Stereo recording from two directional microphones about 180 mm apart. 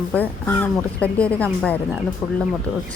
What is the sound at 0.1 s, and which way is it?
Speech, 10° left (ahead or behind).